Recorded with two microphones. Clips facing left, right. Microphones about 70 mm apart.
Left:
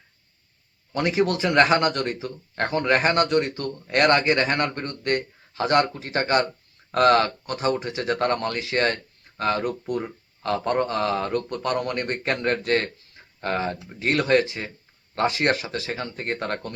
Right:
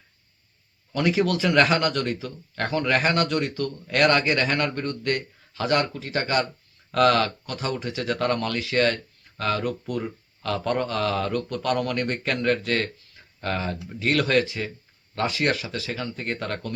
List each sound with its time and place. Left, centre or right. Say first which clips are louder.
0.9 s speech: even; left